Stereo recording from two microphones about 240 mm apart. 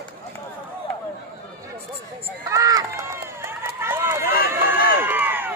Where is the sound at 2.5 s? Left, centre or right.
Centre.